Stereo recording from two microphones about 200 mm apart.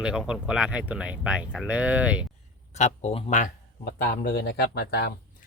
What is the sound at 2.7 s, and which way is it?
Speech, 35° left (ahead or behind).